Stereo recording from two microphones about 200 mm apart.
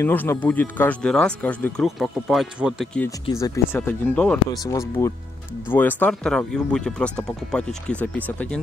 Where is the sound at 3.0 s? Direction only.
15° left (ahead or behind).